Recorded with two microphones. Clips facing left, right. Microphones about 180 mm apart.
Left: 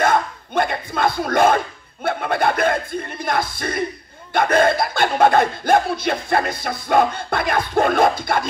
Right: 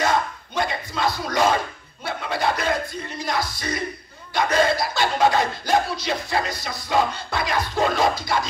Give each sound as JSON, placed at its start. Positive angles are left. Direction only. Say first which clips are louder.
{"t": 0.0, "sound": "music", "louder": "left 4 dB", "side_deg": 55}
{"t": 2.0, "sound": "speech", "louder": "left 5 dB", "side_deg": 55}